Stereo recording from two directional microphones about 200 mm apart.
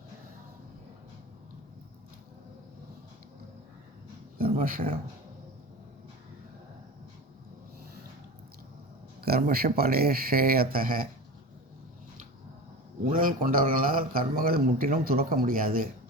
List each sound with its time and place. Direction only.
4.4 s a man's voice: 45° right (ahead or behind)
9.2 s a man's voice: 50° right (ahead or behind)
13.1 s a man's voice: 45° right (ahead or behind)